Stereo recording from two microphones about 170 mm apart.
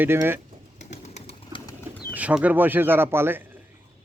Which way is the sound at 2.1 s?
10° right (ahead or behind).